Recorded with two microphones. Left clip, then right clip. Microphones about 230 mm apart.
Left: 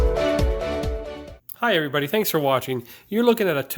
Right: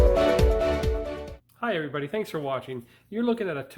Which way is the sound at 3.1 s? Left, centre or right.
Left.